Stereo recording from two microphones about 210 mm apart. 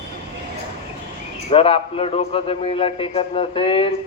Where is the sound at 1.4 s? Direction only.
25° left (ahead or behind).